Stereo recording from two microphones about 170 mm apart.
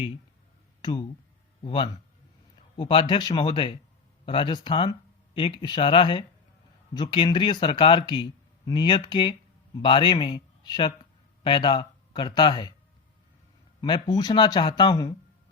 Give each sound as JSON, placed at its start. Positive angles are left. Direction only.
{"t": 0.8, "sound": "speech", "side_deg": 25}
{"t": 13.8, "sound": "speech", "side_deg": 25}